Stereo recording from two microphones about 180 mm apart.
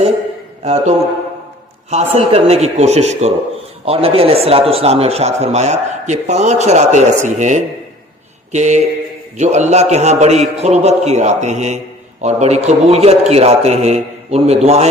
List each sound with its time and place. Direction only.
0.6 s speech: 40° right (ahead or behind)